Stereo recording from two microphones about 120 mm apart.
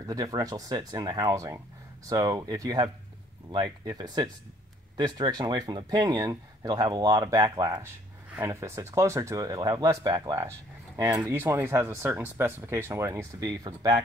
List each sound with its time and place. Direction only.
0.0 s speech: 30° right (ahead or behind)
13.5 s speech: 35° right (ahead or behind)